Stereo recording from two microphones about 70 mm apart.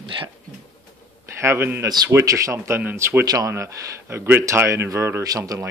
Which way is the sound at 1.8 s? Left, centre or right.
Right.